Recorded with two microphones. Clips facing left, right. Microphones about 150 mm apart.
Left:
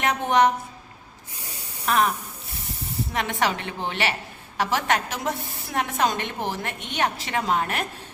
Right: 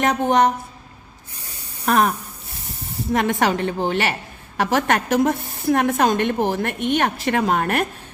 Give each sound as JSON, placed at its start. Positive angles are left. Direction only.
{"t": 0.0, "sound": "a woman's voice", "side_deg": -40}
{"t": 1.8, "sound": "a woman's voice", "side_deg": -45}